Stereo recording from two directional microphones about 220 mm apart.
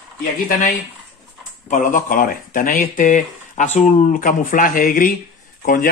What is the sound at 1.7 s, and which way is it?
Speech, 35° left (ahead or behind).